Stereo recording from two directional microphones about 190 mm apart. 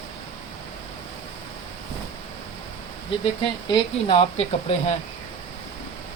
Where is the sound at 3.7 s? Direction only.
30° left (ahead or behind).